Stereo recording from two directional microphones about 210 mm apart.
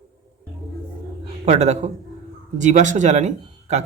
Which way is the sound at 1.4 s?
30° right (ahead or behind).